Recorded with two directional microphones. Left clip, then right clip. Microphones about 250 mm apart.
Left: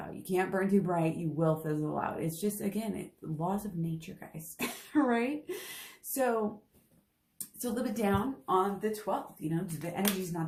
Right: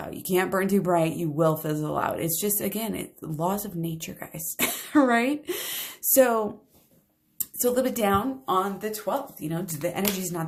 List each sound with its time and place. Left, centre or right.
0.2 s speech: right
7.6 s speech: right